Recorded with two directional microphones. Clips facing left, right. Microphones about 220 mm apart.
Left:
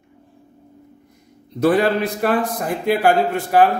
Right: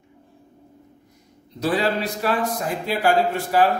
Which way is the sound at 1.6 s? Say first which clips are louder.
Left 6 dB; 55° left (ahead or behind).